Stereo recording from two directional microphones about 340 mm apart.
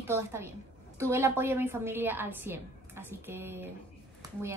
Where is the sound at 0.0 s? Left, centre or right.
Centre.